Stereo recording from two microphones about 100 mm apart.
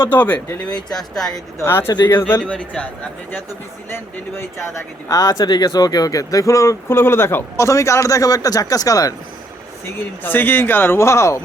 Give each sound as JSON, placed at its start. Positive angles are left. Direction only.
{"t": 0.0, "sound": "speech", "side_deg": 20}
{"t": 1.5, "sound": "speech", "side_deg": 25}
{"t": 2.4, "sound": "speech", "side_deg": 10}
{"t": 3.8, "sound": "speech", "side_deg": 25}
{"t": 10.2, "sound": "speech", "side_deg": 20}